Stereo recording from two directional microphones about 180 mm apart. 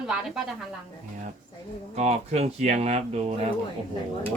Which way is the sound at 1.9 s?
35° right (ahead or behind).